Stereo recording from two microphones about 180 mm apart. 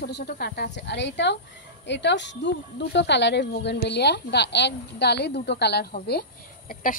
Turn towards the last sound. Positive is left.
turn(degrees=50)  # may be behind; listen again after turning